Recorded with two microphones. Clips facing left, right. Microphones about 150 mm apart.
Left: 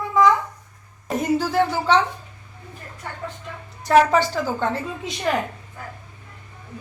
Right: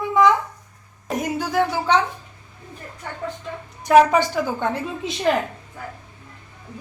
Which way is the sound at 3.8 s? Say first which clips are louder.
Right 2 dB; 15° right (ahead or behind).